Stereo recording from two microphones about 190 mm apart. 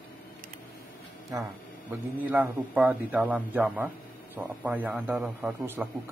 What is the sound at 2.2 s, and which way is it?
A man's voice, 10° right (ahead or behind).